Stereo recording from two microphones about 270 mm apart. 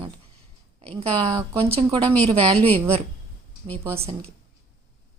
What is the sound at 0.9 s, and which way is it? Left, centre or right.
A woman's voice, centre.